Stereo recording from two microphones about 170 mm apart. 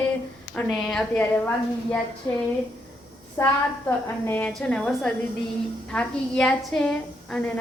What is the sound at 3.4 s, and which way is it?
A woman's voice, 15° left (ahead or behind).